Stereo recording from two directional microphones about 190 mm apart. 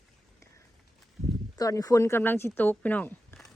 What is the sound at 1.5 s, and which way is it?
Speech, 20° left (ahead or behind).